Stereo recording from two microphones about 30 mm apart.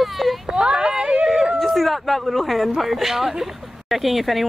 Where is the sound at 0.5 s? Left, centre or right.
Right.